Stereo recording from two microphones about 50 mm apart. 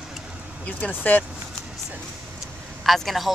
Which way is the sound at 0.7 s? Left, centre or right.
Left.